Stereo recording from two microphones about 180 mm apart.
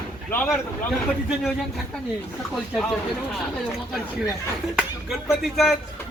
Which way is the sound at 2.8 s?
Centre (ahead or behind).